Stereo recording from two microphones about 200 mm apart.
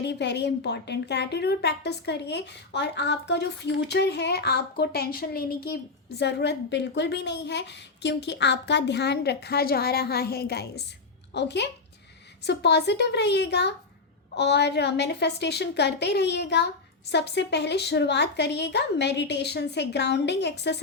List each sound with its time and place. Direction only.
0.0 s a woman's voice: 60° left (ahead or behind)